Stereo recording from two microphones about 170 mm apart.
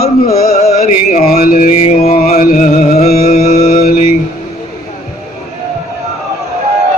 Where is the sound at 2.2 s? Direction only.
50° left (ahead or behind).